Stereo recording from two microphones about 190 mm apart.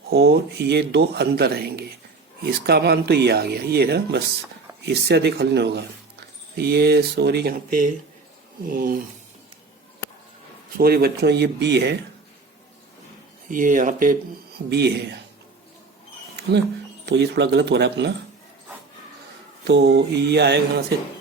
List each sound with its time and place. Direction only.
0.1 s speech: 60° right (ahead or behind)
10.8 s speech: 55° right (ahead or behind)
13.5 s speech: 45° right (ahead or behind)
14.7 s speech: 60° right (ahead or behind)
17.1 s speech: 65° right (ahead or behind)
19.6 s speech: 60° right (ahead or behind)